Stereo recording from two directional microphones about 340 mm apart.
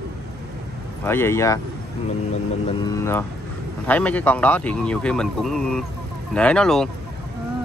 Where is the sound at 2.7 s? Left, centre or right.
Centre.